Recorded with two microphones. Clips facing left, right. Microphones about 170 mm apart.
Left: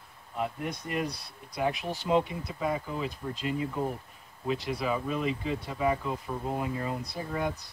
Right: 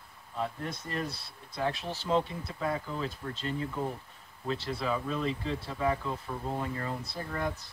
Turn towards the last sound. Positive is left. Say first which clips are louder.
# left 2 dB
turn(degrees=10)  # may be behind; listen again after turning